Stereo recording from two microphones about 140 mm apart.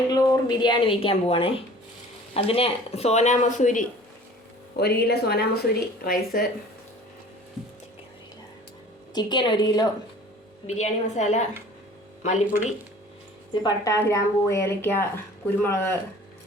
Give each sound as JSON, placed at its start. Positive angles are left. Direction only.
{"t": 0.1, "sound": "a woman's voice", "side_deg": 25}
{"t": 4.9, "sound": "speech", "side_deg": 90}
{"t": 9.1, "sound": "a woman's voice", "side_deg": 35}
{"t": 10.7, "sound": "a woman's voice", "side_deg": 55}
{"t": 13.5, "sound": "speech", "side_deg": 30}